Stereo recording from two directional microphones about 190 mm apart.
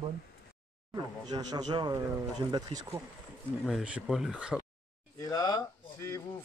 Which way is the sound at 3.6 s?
5° right (ahead or behind).